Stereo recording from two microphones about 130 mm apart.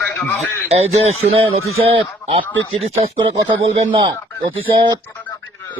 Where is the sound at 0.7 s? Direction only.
55° right (ahead or behind).